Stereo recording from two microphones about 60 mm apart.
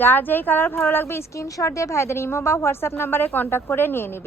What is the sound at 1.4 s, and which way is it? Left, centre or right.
Speech, left.